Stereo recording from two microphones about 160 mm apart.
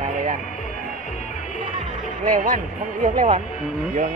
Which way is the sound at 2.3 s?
55° right (ahead or behind).